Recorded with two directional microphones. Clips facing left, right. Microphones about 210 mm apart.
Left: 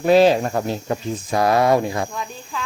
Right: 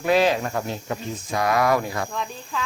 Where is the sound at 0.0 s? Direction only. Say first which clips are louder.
Left 6 dB; 30° left (ahead or behind).